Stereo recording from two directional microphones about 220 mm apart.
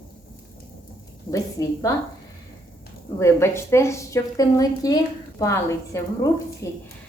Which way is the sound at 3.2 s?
10° left (ahead or behind).